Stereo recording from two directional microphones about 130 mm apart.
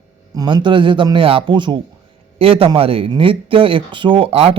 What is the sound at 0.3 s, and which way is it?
A man's voice, 35° right (ahead or behind).